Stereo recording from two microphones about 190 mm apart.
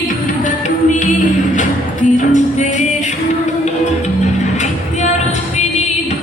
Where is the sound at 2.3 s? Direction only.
40° left (ahead or behind).